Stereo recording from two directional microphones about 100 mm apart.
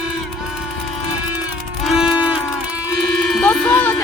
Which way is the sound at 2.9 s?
Centre (ahead or behind).